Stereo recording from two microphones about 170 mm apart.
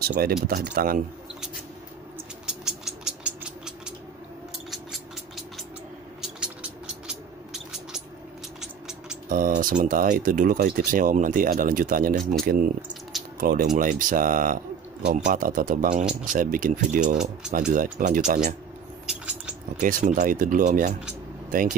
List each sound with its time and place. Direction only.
0.0 s speech: 65° right (ahead or behind)
2.4 s a sound: 5° right (ahead or behind)
4.6 s cat: centre (ahead or behind)
7.1 s a sound: 5° right (ahead or behind)
9.3 s speech: 55° right (ahead or behind)
13.4 s speech: 50° right (ahead or behind)
19.0 s rodents: 5° right (ahead or behind)
19.8 s speech: 50° right (ahead or behind)